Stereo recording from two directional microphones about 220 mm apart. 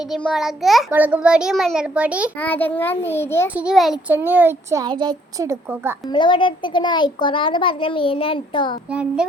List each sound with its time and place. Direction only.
0.1 s a child's voice: centre (ahead or behind)
2.4 s a child's voice: 10° left (ahead or behind)
3.5 s a child's voice: 5° right (ahead or behind)
6.1 s a child's voice: 20° left (ahead or behind)
8.9 s a child's voice: 5° right (ahead or behind)